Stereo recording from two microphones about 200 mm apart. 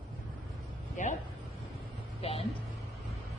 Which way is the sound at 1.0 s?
40° left (ahead or behind).